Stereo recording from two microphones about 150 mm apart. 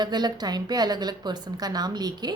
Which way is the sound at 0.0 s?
30° right (ahead or behind).